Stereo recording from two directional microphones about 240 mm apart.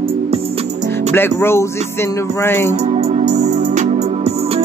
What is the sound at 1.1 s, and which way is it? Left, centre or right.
Speech, centre.